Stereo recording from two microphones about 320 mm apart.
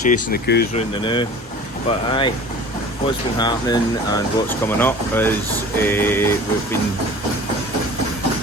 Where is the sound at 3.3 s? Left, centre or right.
Centre.